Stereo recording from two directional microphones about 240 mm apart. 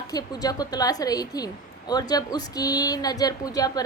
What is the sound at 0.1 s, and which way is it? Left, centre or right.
A woman's voice, centre.